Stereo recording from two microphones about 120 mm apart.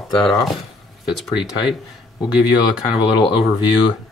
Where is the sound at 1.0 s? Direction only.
5° right (ahead or behind).